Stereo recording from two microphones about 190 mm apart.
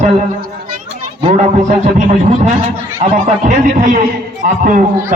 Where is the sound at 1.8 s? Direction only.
40° right (ahead or behind).